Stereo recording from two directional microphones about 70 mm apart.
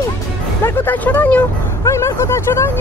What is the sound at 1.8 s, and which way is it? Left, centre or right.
Speech, left.